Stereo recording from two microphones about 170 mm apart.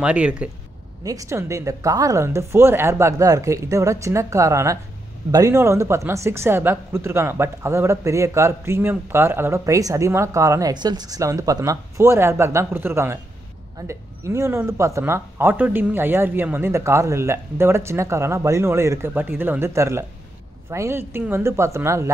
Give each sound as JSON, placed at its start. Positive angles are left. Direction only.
{"t": 0.0, "sound": "speech", "side_deg": -5}
{"t": 1.0, "sound": "speech", "side_deg": -20}